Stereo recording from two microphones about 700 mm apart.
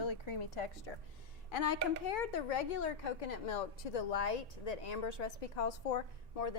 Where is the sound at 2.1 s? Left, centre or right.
Left.